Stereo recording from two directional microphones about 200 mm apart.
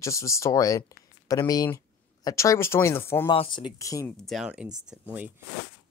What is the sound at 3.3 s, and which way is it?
Speech, 25° left (ahead or behind).